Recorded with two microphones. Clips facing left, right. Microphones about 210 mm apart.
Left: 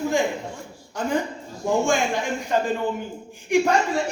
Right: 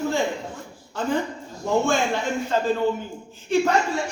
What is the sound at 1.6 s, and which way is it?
Speech, 15° left (ahead or behind).